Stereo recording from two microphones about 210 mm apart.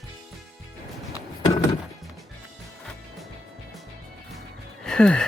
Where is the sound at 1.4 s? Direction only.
20° left (ahead or behind).